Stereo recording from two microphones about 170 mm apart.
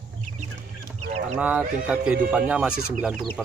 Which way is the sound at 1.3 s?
10° right (ahead or behind).